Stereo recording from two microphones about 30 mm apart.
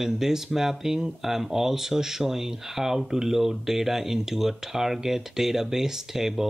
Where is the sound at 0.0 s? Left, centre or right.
Centre.